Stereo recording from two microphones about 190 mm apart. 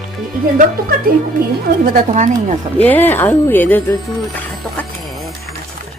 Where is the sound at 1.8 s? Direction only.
45° right (ahead or behind).